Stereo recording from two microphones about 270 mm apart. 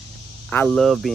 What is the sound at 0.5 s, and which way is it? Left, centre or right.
Speech, centre.